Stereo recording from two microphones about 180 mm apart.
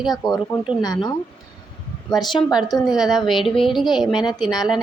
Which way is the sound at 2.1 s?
Centre (ahead or behind).